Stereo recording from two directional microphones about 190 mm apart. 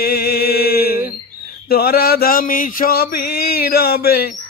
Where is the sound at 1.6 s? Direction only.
55° left (ahead or behind).